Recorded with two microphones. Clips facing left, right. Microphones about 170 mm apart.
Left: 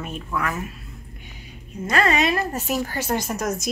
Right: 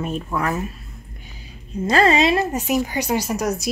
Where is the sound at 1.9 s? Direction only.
30° right (ahead or behind); by 3.4 s 5° right (ahead or behind).